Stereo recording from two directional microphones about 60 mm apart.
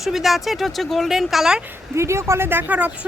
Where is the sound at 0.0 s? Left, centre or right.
Centre.